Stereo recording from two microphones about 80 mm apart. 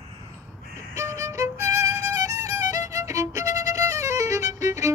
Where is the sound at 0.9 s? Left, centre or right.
Right.